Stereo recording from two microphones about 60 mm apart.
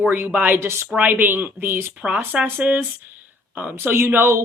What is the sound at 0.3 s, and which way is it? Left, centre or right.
Speech, right.